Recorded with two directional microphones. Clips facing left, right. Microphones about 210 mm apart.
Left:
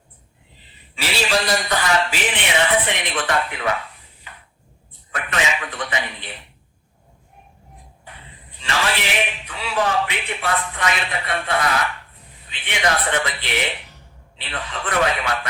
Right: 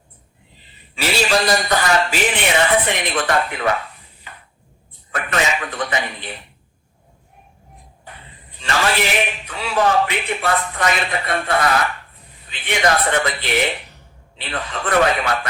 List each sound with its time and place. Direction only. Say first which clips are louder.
0.9 s a man's voice: right 3 dB; 45° right (ahead or behind)
8.5 s a man's voice: right 4 dB; 45° right (ahead or behind)